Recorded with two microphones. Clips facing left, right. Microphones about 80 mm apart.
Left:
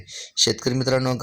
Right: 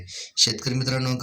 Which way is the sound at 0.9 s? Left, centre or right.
Left.